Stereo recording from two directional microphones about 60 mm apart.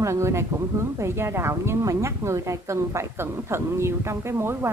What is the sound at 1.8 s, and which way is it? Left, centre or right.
Speech, right.